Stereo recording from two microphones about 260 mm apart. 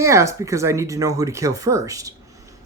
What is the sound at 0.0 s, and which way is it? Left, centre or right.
Speech, centre.